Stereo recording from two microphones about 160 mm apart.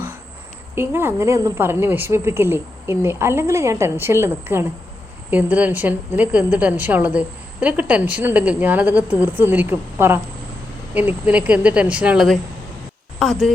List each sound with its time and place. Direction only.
0.8 s a woman's voice: 15° right (ahead or behind)